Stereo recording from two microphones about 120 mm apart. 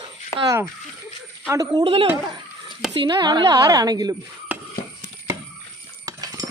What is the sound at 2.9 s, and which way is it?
Speech, 40° right (ahead or behind).